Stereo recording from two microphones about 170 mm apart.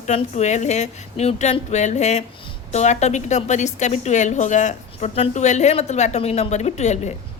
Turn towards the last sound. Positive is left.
turn(degrees=40)  # may be behind; listen again after turning